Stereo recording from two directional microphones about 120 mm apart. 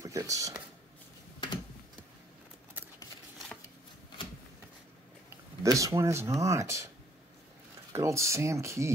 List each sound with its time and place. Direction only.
0.0 s speech: 30° right (ahead or behind)
5.6 s speech: 25° right (ahead or behind)
7.9 s speech: 25° right (ahead or behind)